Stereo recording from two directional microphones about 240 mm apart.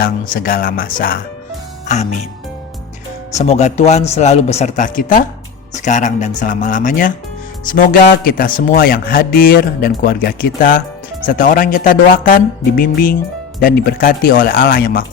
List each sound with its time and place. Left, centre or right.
0.0 s speech: left
3.3 s a man's voice: left